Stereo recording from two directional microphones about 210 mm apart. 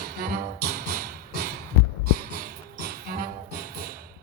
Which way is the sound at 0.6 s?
45° right (ahead or behind).